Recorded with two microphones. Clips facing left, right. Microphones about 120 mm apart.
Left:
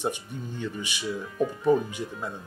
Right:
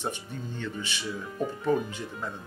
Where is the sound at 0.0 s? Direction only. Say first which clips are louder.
Left 3 dB; 15° left (ahead or behind).